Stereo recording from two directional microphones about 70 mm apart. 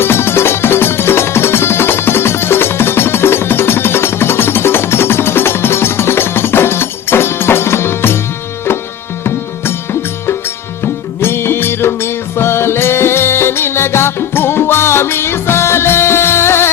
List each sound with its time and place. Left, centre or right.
0.0 s music: left
11.2 s music: left